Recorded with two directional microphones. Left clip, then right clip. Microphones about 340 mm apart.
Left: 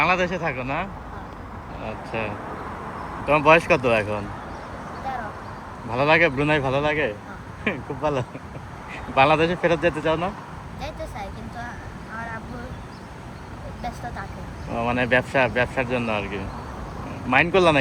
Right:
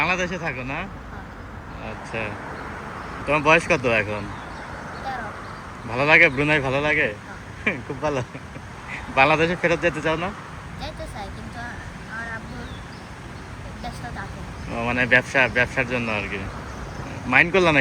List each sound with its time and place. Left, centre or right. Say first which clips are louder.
0.0 s speech: left 2 dB; centre
5.9 s speech: right 3 dB; centre
10.8 s vehicle: left 1 dB; centre
14.7 s speech: right 2 dB; centre